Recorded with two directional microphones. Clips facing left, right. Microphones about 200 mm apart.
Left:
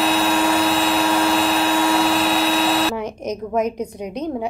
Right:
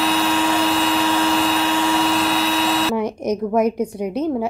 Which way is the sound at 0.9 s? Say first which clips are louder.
Even; 35° left (ahead or behind).